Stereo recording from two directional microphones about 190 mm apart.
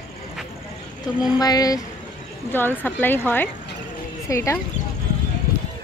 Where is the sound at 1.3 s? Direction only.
20° left (ahead or behind).